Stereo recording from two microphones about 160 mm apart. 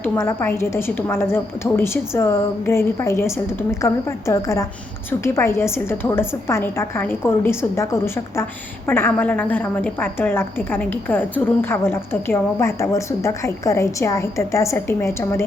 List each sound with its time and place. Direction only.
0.0 s a woman's voice: 15° left (ahead or behind)